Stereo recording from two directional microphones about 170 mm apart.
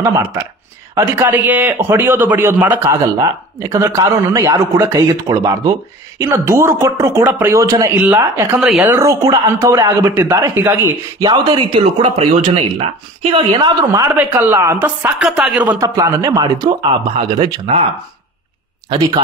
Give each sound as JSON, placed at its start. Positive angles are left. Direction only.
{"t": 0.9, "sound": "a man's voice", "side_deg": -15}
{"t": 8.5, "sound": "speech", "side_deg": -5}
{"t": 8.9, "sound": "a man's voice", "side_deg": -20}
{"t": 11.2, "sound": "speech", "side_deg": -30}
{"t": 14.1, "sound": "a man's voice", "side_deg": -10}